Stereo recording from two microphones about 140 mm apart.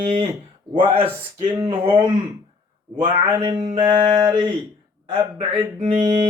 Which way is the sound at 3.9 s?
30° right (ahead or behind).